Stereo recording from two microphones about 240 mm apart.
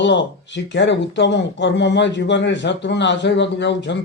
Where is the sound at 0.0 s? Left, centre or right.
Left.